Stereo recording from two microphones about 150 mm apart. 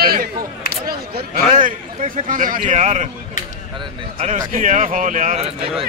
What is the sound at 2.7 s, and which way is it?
Speech, 50° right (ahead or behind).